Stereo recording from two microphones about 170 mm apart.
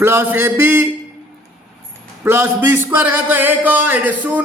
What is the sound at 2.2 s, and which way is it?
Speech, 10° right (ahead or behind).